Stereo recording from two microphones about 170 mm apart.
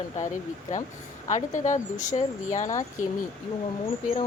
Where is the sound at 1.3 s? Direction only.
45° left (ahead or behind).